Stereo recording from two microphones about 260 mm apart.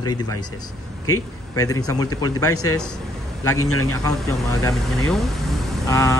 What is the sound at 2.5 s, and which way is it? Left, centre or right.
A man's voice, left.